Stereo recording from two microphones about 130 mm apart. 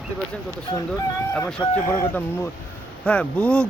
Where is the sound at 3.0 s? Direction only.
10° left (ahead or behind).